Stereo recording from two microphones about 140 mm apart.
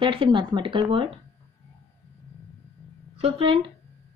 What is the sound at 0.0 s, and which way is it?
Speech, 35° right (ahead or behind).